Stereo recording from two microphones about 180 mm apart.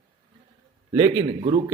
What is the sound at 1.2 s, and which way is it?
Speech, 30° right (ahead or behind).